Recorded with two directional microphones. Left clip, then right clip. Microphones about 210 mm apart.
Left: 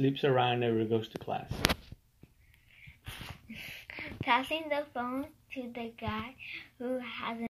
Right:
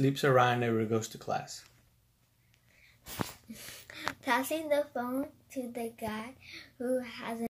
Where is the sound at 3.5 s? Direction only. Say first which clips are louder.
Left 4 dB; 25° right (ahead or behind).